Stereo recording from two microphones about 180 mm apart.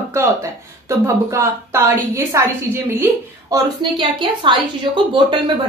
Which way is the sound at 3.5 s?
25° right (ahead or behind).